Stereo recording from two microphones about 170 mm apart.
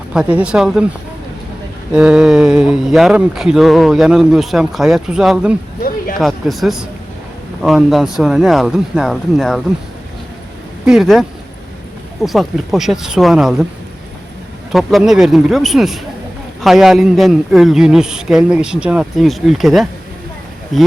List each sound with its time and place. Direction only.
0.1 s speech: 5° right (ahead or behind)
1.9 s speech: 5° right (ahead or behind)
10.8 s speech: centre (ahead or behind)
14.7 s speech: centre (ahead or behind)